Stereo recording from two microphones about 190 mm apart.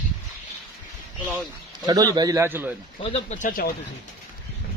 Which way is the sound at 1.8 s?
20° right (ahead or behind).